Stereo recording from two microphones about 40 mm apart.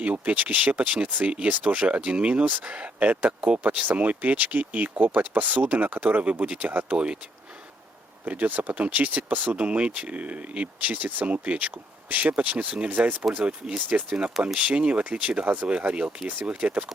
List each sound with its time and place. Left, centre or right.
0.0 s speech: right
8.2 s speech: right
15.4 s speech: right